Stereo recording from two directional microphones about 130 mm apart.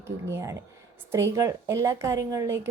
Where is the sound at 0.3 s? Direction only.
20° right (ahead or behind).